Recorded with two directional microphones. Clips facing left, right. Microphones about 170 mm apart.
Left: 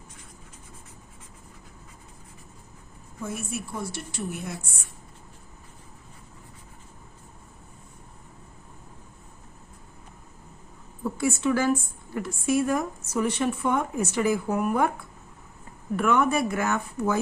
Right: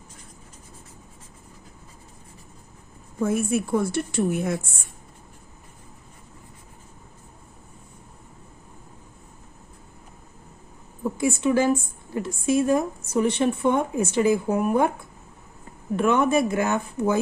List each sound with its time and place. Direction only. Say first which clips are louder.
3.2 s a woman's voice: right 10 dB; 55° right (ahead or behind)
11.0 s a woman's voice: right 2 dB; 15° right (ahead or behind)